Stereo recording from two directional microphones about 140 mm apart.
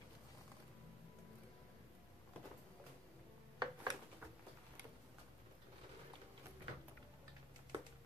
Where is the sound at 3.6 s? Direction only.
35° right (ahead or behind).